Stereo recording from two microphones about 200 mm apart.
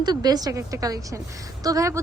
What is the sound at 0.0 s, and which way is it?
A woman's voice, 20° right (ahead or behind).